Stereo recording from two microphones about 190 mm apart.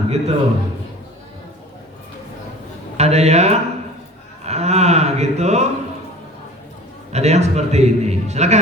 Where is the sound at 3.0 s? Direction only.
35° right (ahead or behind).